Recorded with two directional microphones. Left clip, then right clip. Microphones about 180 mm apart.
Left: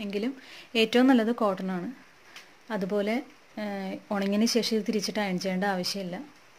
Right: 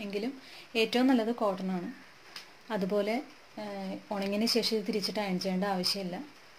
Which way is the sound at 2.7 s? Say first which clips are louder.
Left 2 dB; 20° left (ahead or behind).